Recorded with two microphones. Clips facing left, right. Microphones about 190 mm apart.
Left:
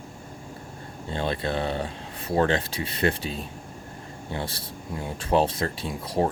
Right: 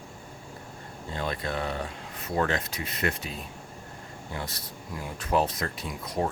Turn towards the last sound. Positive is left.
turn(degrees=30)  # may be behind; listen again after turning